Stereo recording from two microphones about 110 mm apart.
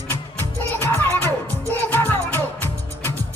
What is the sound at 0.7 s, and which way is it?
Music, 20° left (ahead or behind).